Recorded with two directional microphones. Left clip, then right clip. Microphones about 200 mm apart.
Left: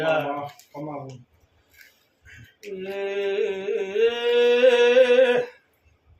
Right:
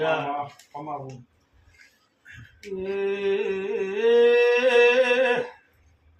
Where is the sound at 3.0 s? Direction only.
15° right (ahead or behind).